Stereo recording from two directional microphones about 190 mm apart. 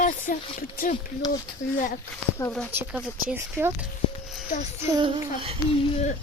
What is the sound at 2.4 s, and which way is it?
Speech, 15° left (ahead or behind).